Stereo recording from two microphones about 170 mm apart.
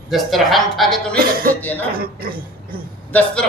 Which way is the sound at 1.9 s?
60° right (ahead or behind).